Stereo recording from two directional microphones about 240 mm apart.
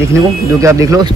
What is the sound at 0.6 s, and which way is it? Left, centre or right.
Speech, centre.